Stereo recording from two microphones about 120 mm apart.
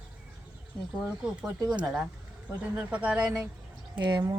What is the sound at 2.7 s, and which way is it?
Speech, 10° right (ahead or behind).